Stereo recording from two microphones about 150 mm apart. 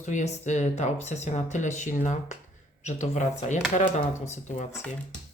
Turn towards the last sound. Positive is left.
turn(degrees=50)  # may be behind; listen again after turning